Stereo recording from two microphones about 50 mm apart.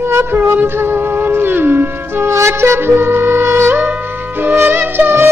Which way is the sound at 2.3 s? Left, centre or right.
Right.